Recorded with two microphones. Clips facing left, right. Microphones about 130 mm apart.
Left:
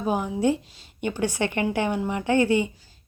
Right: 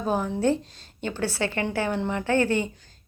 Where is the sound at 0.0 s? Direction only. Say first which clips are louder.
Left 1 dB; 10° left (ahead or behind).